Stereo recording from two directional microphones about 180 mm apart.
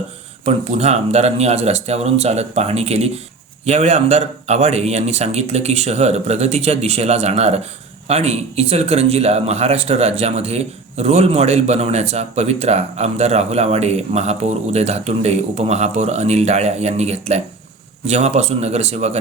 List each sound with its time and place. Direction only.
0.4 s speech: 35° right (ahead or behind)